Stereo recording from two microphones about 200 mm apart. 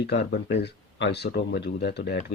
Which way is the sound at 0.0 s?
60° left (ahead or behind).